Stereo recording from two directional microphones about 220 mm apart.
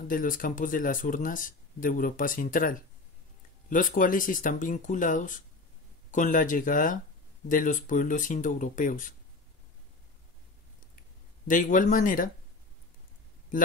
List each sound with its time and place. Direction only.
0.1 s speech: 40° left (ahead or behind)
11.0 s speech: 35° left (ahead or behind)
13.5 s speech: 40° left (ahead or behind)